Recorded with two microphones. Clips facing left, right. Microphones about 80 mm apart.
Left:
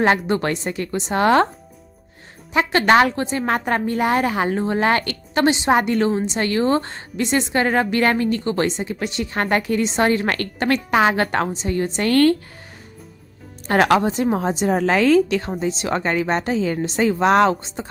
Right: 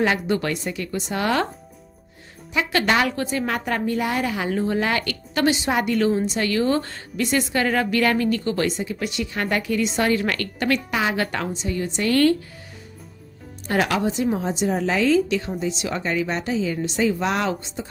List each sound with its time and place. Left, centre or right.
0.0 s a woman's voice: left
2.5 s a woman's voice: left
13.7 s a woman's voice: left